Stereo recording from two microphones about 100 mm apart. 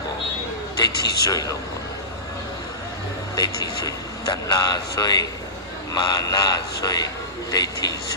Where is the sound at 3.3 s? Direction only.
35° left (ahead or behind).